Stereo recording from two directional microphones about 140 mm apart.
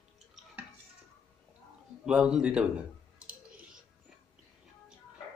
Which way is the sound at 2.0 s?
5° right (ahead or behind).